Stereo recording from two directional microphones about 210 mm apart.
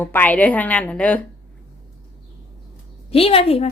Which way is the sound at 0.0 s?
10° left (ahead or behind).